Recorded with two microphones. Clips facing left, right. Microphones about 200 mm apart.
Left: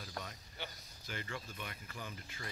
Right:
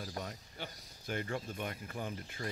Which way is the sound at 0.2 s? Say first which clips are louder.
Right 4 dB; 45° right (ahead or behind).